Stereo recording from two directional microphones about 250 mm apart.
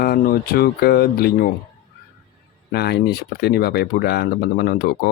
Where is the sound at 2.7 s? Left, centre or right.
Left.